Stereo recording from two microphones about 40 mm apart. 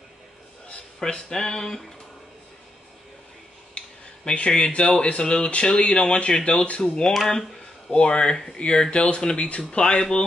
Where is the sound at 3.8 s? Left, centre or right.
Left.